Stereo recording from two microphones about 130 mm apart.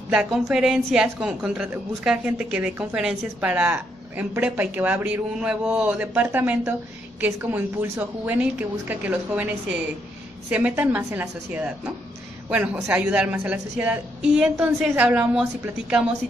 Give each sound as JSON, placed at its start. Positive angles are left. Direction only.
{"t": 0.1, "sound": "a woman's voice", "side_deg": -5}